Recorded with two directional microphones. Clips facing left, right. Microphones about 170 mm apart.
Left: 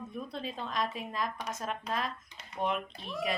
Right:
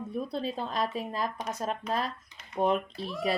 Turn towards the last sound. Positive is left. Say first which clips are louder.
# right 4 dB
turn(degrees=-35)  # may be behind; listen again after turning